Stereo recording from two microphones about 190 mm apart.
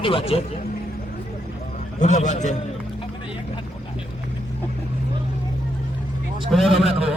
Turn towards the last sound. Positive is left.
turn(degrees=-5)  # may be behind; listen again after turning